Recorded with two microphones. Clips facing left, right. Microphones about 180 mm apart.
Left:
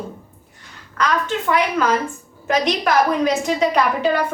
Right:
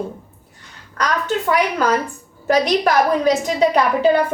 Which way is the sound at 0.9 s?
40° right (ahead or behind).